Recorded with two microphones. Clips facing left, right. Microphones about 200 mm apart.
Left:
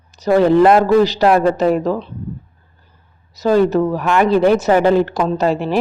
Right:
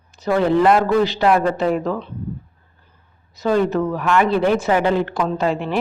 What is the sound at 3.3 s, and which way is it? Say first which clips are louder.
A woman's voice: left 4 dB; 40° left (ahead or behind).